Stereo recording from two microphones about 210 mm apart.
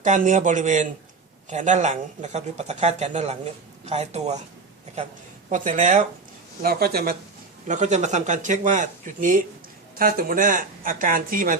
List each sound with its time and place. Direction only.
0.0 s speech: 35° right (ahead or behind)
5.5 s speech: 35° right (ahead or behind)
7.7 s speech: 35° right (ahead or behind)